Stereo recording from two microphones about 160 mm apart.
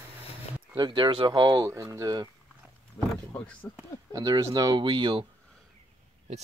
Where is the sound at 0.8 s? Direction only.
30° right (ahead or behind).